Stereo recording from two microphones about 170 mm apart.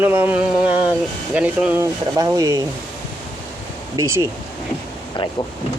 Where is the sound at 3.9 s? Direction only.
15° right (ahead or behind).